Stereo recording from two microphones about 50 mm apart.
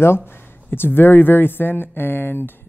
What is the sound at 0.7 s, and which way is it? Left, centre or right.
Speech, left.